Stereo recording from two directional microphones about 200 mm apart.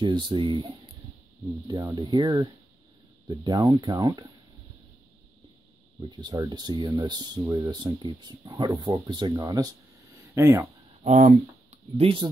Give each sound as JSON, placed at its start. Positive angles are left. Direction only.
{"t": 0.0, "sound": "speech", "side_deg": -25}
{"t": 5.9, "sound": "speech", "side_deg": -20}
{"t": 11.1, "sound": "speech", "side_deg": -40}
{"t": 12.0, "sound": "speech", "side_deg": -25}